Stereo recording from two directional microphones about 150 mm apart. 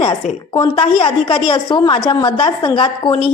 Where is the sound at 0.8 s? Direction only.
35° left (ahead or behind).